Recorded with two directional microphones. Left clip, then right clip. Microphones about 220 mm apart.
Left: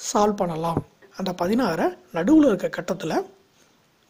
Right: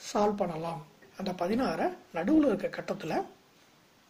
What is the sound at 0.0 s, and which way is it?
A woman's voice, 45° left (ahead or behind).